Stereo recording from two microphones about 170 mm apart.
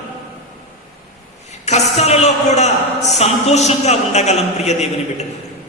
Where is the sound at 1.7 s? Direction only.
40° left (ahead or behind).